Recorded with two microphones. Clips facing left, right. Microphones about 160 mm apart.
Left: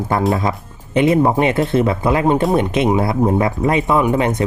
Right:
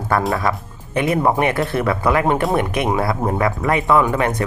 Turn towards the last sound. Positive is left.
turn(degrees=20)  # may be behind; listen again after turning